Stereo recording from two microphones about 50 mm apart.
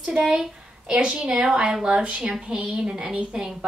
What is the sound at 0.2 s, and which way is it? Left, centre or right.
A woman's voice, centre.